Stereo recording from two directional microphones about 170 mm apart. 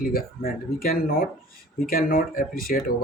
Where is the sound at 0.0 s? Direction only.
60° left (ahead or behind).